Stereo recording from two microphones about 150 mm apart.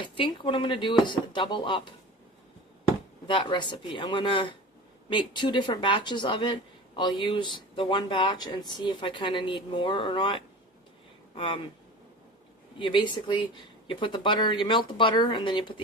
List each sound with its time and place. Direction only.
0.0 s speech: 30° left (ahead or behind)
3.2 s speech: 30° left (ahead or behind)
12.8 s speech: 30° left (ahead or behind)